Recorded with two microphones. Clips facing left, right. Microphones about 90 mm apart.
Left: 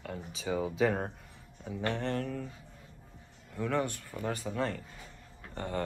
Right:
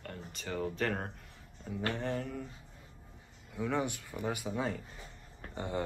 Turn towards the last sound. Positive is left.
turn(degrees=-15)  # may be behind; listen again after turning